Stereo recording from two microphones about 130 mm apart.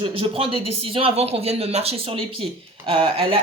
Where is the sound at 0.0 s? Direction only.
45° right (ahead or behind).